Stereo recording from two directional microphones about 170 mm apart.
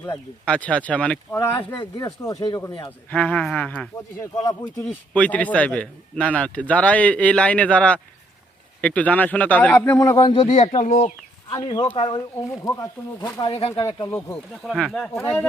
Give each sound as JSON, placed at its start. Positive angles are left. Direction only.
{"t": 0.4, "sound": "a man's voice", "side_deg": 5}
{"t": 3.1, "sound": "a man's voice", "side_deg": 10}
{"t": 4.4, "sound": "speech", "side_deg": 20}
{"t": 5.1, "sound": "a man's voice", "side_deg": 10}
{"t": 10.2, "sound": "speech", "side_deg": 30}
{"t": 11.5, "sound": "speech", "side_deg": 25}
{"t": 13.5, "sound": "speech", "side_deg": 35}
{"t": 14.5, "sound": "speech", "side_deg": 0}
{"t": 15.2, "sound": "a man's voice", "side_deg": 15}